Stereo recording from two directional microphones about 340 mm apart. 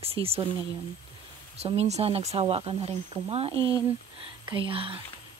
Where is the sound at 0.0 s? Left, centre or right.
Centre.